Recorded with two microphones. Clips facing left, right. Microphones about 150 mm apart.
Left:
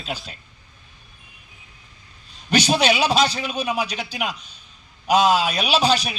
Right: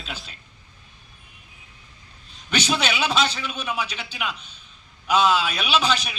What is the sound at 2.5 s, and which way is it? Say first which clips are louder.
A man's voice: left 6 dB; 35° left (ahead or behind).